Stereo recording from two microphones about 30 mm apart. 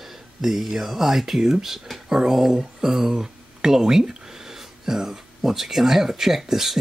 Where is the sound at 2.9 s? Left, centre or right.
Centre.